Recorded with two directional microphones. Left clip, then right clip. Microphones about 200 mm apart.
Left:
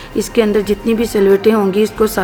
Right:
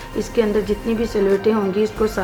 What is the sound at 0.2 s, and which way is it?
A woman's voice, 50° left (ahead or behind).